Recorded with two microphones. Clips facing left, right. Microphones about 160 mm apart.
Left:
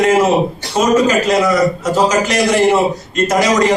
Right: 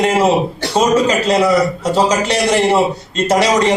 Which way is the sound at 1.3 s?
30° right (ahead or behind).